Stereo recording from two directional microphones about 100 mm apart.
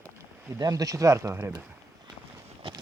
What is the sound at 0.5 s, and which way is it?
Speech, 35° right (ahead or behind).